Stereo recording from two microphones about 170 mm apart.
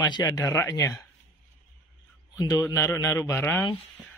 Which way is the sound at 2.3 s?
20° left (ahead or behind).